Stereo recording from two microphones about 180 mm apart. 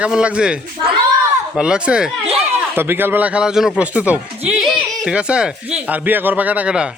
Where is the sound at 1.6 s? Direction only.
5° right (ahead or behind).